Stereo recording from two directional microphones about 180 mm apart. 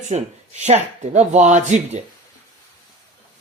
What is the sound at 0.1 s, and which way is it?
Speech, 35° right (ahead or behind).